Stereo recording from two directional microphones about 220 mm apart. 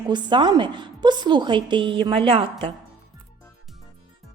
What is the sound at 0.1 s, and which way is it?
A woman's voice, 20° right (ahead or behind).